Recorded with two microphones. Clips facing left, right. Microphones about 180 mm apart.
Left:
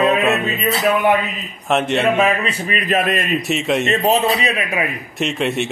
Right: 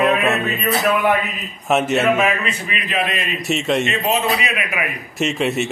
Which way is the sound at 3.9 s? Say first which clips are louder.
Left 3 dB; 35° left (ahead or behind).